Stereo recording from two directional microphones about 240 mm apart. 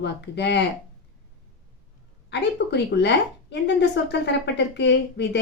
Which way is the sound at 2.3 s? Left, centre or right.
Left.